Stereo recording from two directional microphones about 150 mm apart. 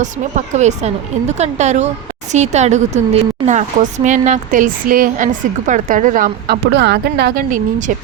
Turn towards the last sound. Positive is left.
turn(degrees=-60)  # may be behind; listen again after turning